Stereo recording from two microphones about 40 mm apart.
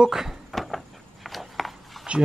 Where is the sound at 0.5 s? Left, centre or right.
Centre.